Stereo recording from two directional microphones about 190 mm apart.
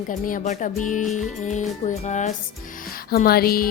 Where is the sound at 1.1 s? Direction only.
40° left (ahead or behind).